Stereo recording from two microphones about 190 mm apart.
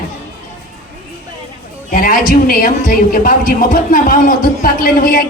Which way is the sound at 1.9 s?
45° left (ahead or behind).